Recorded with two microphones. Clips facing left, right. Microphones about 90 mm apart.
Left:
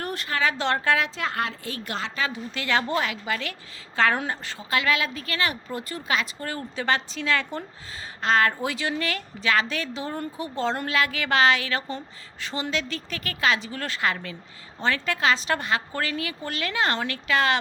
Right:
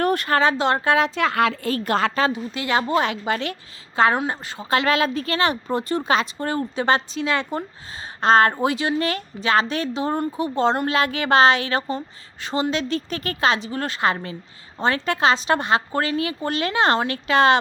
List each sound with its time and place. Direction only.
0.0 s a sound: 55° right (ahead or behind)
0.5 s a woman's voice: 20° right (ahead or behind)
1.1 s a woman's voice: 90° right
1.6 s a woman's voice: 45° right (ahead or behind)
2.3 s a woman's voice: 15° right (ahead or behind)
4.7 s a woman's voice: 35° right (ahead or behind)
8.2 s a woman's voice: 30° right (ahead or behind)